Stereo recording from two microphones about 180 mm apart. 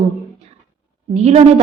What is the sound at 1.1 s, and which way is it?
Speech, 35° right (ahead or behind).